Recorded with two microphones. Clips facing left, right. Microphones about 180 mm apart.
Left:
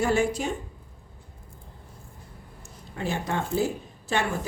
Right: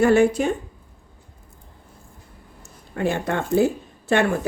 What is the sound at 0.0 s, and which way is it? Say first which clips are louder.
Speech: right 8 dB; 60° right (ahead or behind).